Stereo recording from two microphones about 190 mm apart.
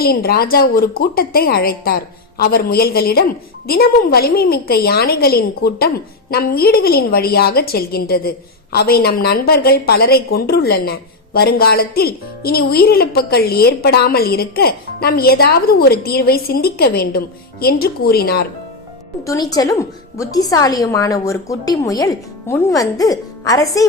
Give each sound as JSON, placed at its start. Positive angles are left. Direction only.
{"t": 0.0, "sound": "a woman's voice", "side_deg": 55}
{"t": 19.2, "sound": "a woman's voice", "side_deg": 20}